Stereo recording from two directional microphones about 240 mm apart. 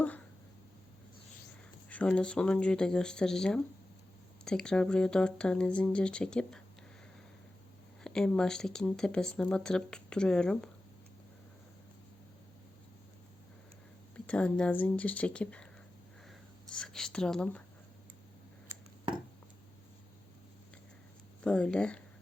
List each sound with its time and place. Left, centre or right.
1.9 s speech: centre
8.0 s speech: centre
14.3 s speech: centre
21.4 s speech: centre